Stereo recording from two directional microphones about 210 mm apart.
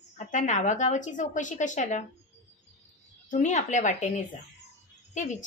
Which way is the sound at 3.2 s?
35° left (ahead or behind).